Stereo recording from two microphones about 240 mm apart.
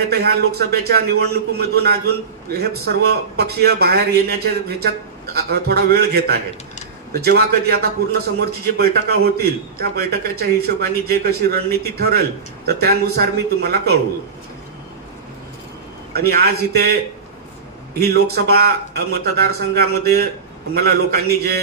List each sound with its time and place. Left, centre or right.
0.1 s a man's voice: right
16.1 s a man's voice: right